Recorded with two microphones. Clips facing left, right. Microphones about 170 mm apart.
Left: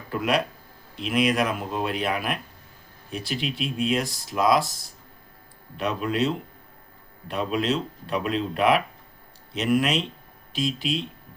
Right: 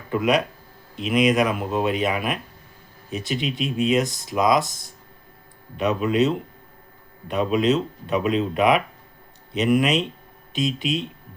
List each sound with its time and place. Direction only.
0.1 s speech: centre (ahead or behind)
5.7 s speech: 5° right (ahead or behind)